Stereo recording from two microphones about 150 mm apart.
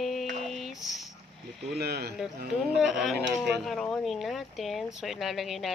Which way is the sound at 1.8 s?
90° right.